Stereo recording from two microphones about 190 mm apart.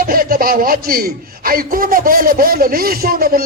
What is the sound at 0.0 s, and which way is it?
A man's voice, 50° right (ahead or behind).